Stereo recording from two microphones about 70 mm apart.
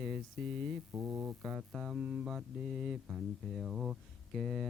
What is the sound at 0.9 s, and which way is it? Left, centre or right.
Speech, right.